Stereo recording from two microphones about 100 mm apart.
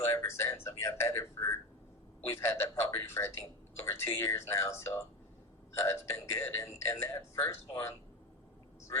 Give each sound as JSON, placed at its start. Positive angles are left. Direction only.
{"t": 0.0, "sound": "a man's voice", "side_deg": 25}